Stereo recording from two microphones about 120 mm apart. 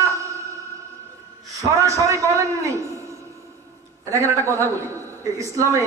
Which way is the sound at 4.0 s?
25° right (ahead or behind).